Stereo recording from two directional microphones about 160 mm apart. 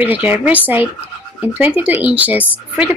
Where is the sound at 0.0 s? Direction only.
10° right (ahead or behind).